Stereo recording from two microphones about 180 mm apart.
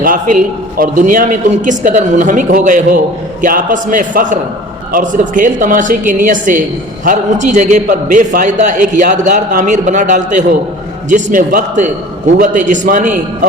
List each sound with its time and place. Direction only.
0.8 s a woman's voice: 50° right (ahead or behind)